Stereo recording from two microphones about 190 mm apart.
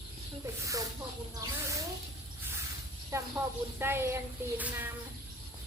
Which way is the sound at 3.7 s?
10° right (ahead or behind).